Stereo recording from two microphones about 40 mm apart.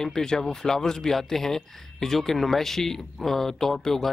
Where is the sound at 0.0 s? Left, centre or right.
Centre.